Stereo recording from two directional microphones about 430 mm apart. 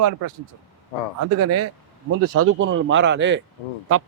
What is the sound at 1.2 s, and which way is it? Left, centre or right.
Speech, right.